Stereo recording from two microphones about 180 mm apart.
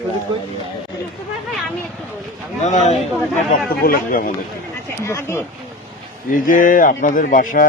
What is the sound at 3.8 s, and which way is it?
Speech, 50° left (ahead or behind).